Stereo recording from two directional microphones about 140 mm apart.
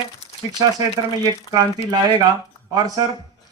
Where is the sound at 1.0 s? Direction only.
30° right (ahead or behind).